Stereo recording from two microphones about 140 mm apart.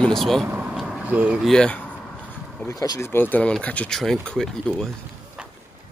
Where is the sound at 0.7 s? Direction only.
10° right (ahead or behind).